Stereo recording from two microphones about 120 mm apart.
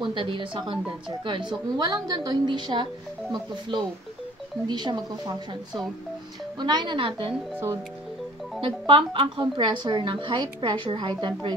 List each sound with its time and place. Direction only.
0.0 s speech: 45° right (ahead or behind)
6.6 s speech: 40° right (ahead or behind)
8.5 s speech: 45° right (ahead or behind)